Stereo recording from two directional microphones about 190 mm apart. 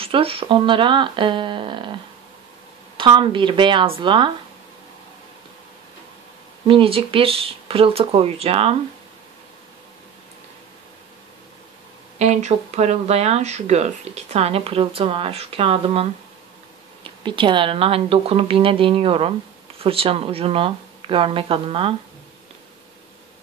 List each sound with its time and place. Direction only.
0.0 s speech: 30° right (ahead or behind)
3.0 s speech: 25° right (ahead or behind)
6.7 s speech: 30° right (ahead or behind)
12.2 s speech: 35° right (ahead or behind)